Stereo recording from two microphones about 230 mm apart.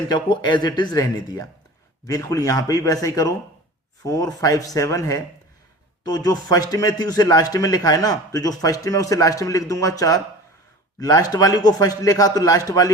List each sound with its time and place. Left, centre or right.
0.1 s a man's voice: centre